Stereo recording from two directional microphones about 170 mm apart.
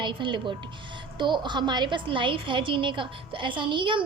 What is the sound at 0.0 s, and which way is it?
A woman's voice, 30° right (ahead or behind).